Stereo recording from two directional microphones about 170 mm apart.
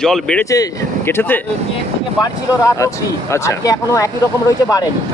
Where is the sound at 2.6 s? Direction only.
20° left (ahead or behind).